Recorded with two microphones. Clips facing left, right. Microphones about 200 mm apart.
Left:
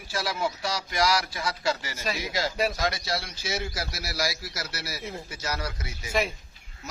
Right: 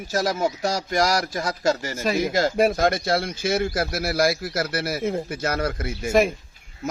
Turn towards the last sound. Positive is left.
turn(degrees=-50)  # may be behind; listen again after turning